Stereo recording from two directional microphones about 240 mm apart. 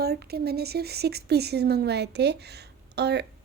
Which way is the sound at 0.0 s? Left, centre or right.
Right.